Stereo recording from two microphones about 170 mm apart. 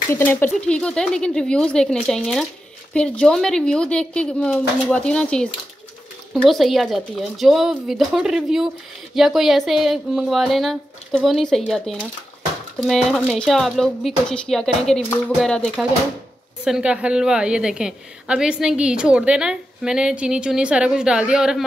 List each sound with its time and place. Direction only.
0.1 s a woman's voice: 15° left (ahead or behind); by 21.6 s 5° right (ahead or behind)